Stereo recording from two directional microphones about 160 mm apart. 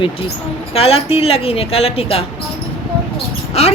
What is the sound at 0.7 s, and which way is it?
Speech, 40° left (ahead or behind).